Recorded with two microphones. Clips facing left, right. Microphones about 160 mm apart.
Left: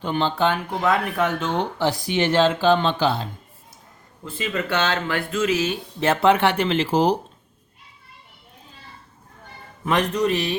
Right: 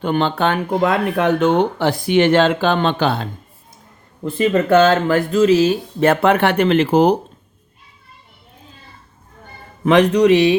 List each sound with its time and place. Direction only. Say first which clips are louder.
0.0 s speech: right 4 dB; 60° right (ahead or behind)
4.2 s speech: right 11 dB; 50° right (ahead or behind); by 5.8 s 35° right (ahead or behind)
6.0 s speech: right 3 dB; 55° right (ahead or behind)
9.8 s speech: right 9 dB; 75° right (ahead or behind)